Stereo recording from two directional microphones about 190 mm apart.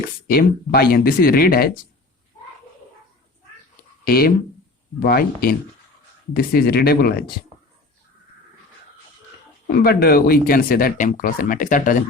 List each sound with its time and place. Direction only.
0.3 s speech: 55° left (ahead or behind)
4.0 s speech: 55° left (ahead or behind)
9.7 s speech: 55° left (ahead or behind)